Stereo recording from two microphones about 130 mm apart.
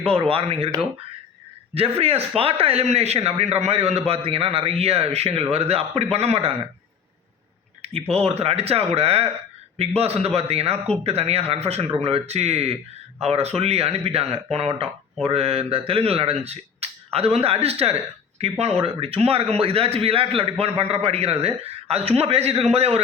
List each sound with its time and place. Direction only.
0.0 s speech: 45° right (ahead or behind)
1.7 s speech: 50° right (ahead or behind)
7.8 s speech: 50° right (ahead or behind)